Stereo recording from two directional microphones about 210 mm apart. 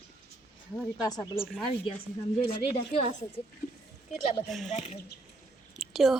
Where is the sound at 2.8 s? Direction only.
30° left (ahead or behind).